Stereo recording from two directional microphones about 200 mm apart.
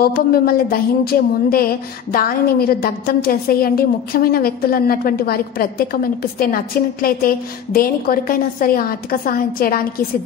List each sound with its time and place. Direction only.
0.0 s a woman's voice: 50° left (ahead or behind)